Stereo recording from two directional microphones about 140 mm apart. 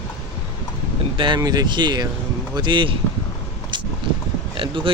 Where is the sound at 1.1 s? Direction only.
35° right (ahead or behind).